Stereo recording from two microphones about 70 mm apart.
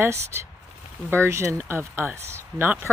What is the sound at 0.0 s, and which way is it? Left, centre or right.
Speech, right.